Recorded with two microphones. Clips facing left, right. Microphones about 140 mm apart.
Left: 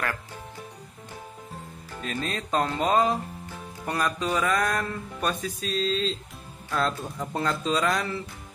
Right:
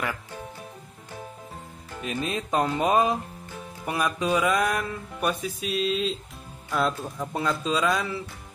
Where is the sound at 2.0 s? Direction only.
15° right (ahead or behind).